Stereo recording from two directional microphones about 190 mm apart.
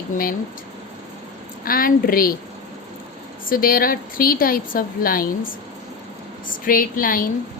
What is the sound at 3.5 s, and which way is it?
A woman's voice, 50° left (ahead or behind).